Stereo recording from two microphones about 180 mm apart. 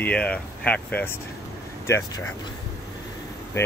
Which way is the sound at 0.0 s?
5° left (ahead or behind).